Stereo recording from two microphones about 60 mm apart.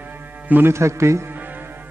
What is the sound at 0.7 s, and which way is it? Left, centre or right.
Speech, right.